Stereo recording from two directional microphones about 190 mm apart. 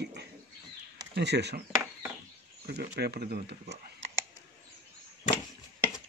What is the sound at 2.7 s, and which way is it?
Speech, 55° right (ahead or behind).